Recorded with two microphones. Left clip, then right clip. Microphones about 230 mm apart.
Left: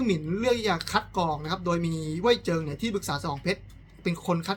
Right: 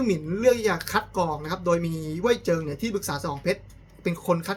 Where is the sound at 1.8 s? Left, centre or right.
Left.